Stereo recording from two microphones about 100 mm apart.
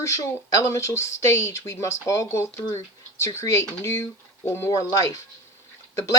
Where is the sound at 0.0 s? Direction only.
30° left (ahead or behind).